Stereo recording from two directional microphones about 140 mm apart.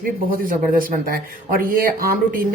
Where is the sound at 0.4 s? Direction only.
85° right.